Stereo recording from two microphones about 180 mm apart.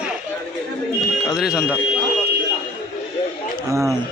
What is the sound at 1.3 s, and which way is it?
Speech, 5° right (ahead or behind).